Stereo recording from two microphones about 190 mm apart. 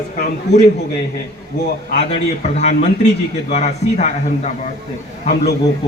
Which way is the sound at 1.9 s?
35° left (ahead or behind).